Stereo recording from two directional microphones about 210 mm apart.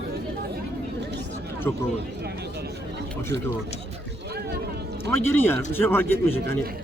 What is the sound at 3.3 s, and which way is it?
Speech, 55° right (ahead or behind).